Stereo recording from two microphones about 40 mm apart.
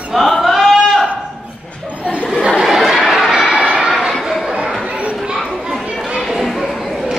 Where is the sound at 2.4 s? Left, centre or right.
Centre.